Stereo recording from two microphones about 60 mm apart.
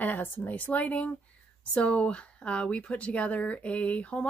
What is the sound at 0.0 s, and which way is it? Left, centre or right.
Speech, left.